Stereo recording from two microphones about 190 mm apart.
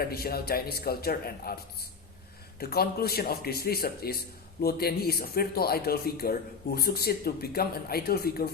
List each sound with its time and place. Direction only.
0.1 s speech: 55° left (ahead or behind)
2.6 s speech: 55° left (ahead or behind)